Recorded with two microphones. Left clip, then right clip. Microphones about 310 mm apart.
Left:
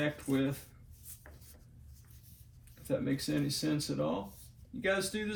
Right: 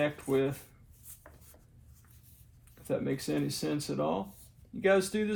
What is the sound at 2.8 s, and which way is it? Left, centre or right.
Speech, right.